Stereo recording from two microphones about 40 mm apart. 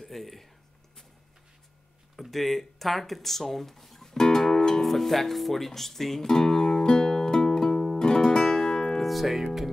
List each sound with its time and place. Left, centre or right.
0.0 s speech: centre
2.3 s speech: centre
4.8 s guitar: centre